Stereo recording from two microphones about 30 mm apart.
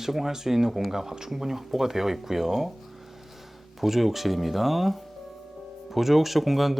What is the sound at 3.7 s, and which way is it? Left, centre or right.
Speech, centre.